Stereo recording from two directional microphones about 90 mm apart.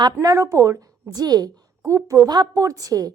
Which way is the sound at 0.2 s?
40° right (ahead or behind).